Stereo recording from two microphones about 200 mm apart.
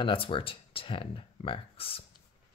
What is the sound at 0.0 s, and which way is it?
Speech, 25° left (ahead or behind).